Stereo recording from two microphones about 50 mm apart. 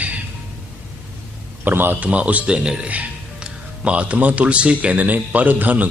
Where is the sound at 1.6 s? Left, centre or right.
Right.